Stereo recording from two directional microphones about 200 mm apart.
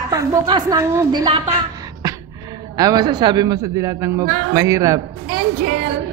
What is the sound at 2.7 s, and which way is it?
A man's voice, 20° right (ahead or behind).